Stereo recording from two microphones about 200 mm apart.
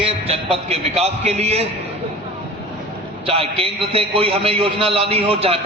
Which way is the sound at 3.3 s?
30° right (ahead or behind).